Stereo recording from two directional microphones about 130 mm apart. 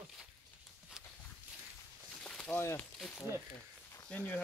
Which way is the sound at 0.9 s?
5° right (ahead or behind).